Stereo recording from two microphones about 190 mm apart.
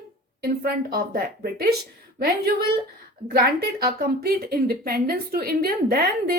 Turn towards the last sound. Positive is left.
turn(degrees=-50)  # may be behind; listen again after turning